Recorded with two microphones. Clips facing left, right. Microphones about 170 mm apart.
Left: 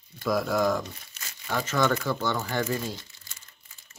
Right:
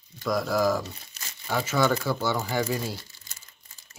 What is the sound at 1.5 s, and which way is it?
Speech, 5° right (ahead or behind).